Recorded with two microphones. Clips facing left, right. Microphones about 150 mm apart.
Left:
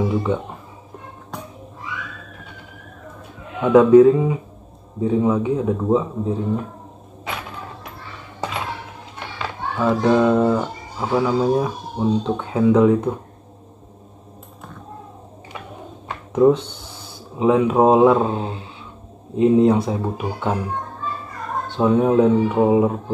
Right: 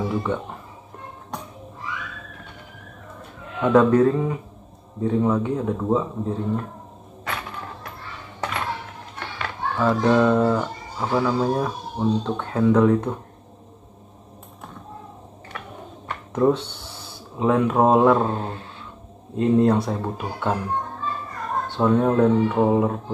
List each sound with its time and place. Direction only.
3.6 s speech: 10° left (ahead or behind)
9.4 s speech: 10° left (ahead or behind)
16.3 s speech: 10° left (ahead or behind)
21.7 s speech: 10° left (ahead or behind)